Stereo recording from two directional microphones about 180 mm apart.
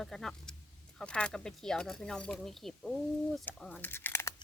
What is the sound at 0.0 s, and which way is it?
Speech, centre (ahead or behind).